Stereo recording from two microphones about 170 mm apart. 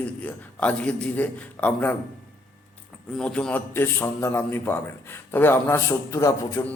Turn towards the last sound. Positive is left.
turn(degrees=15)  # may be behind; listen again after turning